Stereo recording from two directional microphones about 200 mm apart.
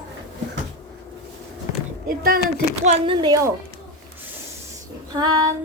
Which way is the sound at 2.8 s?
35° right (ahead or behind).